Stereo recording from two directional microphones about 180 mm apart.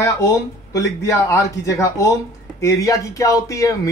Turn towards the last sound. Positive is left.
turn(degrees=20)  # may be behind; listen again after turning